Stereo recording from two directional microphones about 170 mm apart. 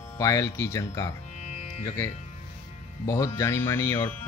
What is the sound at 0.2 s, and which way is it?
Speech, 20° left (ahead or behind).